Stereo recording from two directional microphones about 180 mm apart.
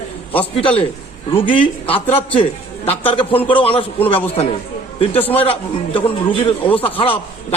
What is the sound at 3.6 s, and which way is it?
Speech, 30° left (ahead or behind).